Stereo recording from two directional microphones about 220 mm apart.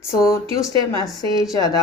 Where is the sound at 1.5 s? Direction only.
15° left (ahead or behind).